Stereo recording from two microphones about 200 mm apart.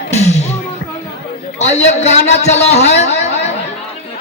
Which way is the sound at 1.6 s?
35° left (ahead or behind).